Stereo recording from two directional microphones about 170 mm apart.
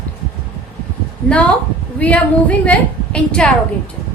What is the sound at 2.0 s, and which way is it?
A woman's voice, 10° left (ahead or behind).